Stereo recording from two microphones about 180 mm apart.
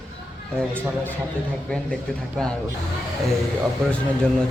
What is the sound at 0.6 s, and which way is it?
Speech, 10° left (ahead or behind).